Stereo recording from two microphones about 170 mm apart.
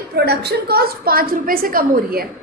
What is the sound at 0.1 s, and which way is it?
A woman's voice, 70° right (ahead or behind).